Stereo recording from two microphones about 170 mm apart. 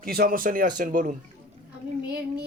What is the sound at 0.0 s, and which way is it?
Speech, 60° right (ahead or behind).